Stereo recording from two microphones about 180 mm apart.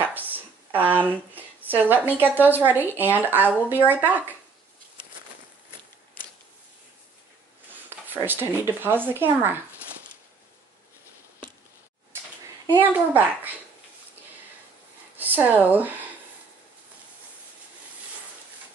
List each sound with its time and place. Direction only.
0.0 s speech: 10° right (ahead or behind)
8.1 s speech: 10° right (ahead or behind)
12.6 s speech: 10° right (ahead or behind)
15.1 s speech: 10° right (ahead or behind)